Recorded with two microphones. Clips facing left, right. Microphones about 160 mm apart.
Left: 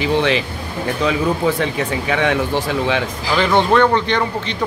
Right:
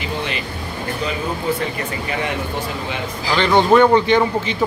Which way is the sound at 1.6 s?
90° left.